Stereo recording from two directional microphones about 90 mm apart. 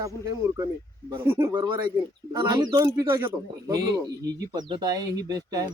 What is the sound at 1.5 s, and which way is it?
Speech, 55° right (ahead or behind).